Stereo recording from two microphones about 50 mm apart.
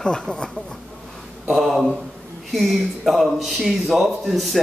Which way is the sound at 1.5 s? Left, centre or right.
Centre.